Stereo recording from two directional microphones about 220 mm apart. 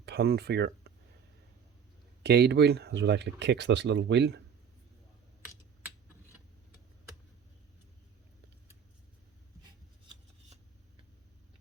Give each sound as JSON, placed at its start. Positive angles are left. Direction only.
{"t": 0.0, "sound": "speech", "side_deg": -45}
{"t": 2.2, "sound": "speech", "side_deg": -45}